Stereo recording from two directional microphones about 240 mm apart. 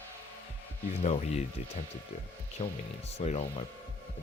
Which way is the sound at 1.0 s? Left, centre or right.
Left.